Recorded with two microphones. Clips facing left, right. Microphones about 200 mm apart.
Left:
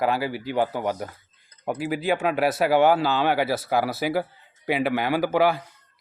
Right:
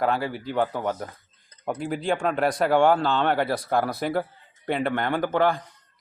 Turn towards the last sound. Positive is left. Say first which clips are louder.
# left 2 dB
turn(degrees=5)  # may be behind; listen again after turning